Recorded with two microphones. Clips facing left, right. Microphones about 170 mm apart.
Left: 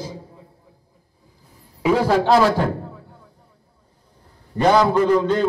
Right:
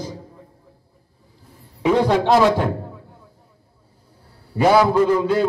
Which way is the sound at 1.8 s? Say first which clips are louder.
Right 1 dB; 5° left (ahead or behind).